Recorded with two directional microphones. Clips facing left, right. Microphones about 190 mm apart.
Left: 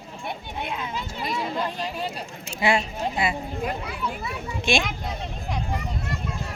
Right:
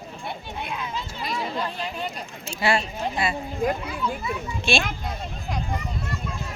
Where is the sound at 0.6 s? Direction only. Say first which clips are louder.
Left 1 dB; 25° left (ahead or behind).